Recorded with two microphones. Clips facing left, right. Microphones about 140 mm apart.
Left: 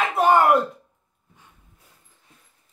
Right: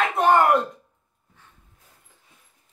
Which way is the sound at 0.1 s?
Centre (ahead or behind).